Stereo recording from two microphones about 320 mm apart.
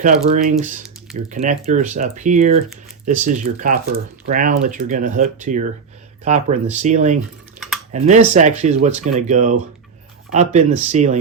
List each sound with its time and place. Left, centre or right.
0.0 s speech: right